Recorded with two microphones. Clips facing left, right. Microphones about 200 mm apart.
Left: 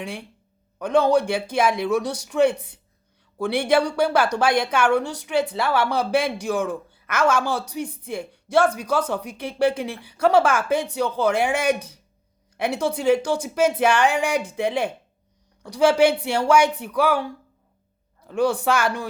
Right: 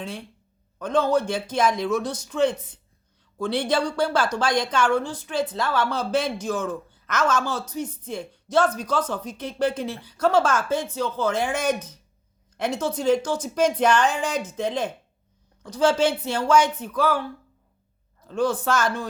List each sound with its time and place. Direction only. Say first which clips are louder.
0.0 s a woman's voice: left 1 dB; 10° left (ahead or behind)
2.6 s a woman's voice: left 2 dB; 65° left (ahead or behind)
3.3 s a woman's voice: left 4 dB; 10° left (ahead or behind)